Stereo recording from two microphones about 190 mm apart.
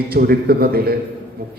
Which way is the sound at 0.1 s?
55° right (ahead or behind).